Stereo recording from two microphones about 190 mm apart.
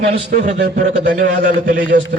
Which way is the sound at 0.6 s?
45° right (ahead or behind).